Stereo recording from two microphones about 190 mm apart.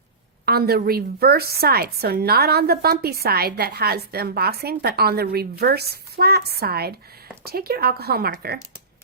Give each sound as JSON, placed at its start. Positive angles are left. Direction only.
{"t": 0.4, "sound": "a woman's voice", "side_deg": -55}